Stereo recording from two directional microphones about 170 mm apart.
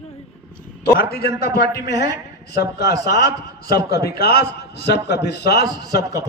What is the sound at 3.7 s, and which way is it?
A man's voice, 70° left (ahead or behind).